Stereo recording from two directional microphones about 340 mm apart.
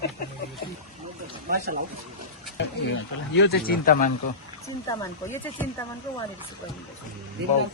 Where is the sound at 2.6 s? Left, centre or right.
Left.